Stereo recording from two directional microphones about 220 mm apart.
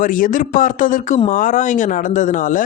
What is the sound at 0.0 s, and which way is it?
Speech, 35° left (ahead or behind).